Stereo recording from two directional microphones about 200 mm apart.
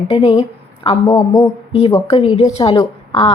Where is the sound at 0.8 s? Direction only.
20° left (ahead or behind).